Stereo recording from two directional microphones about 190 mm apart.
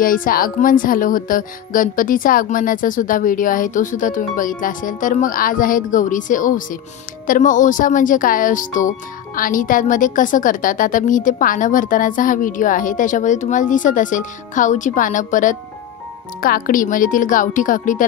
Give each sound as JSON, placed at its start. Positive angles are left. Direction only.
{"t": 0.0, "sound": "speech", "side_deg": 45}